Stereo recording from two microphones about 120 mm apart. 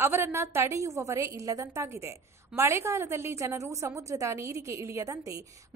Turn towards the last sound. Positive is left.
turn(degrees=-25)  # may be behind; listen again after turning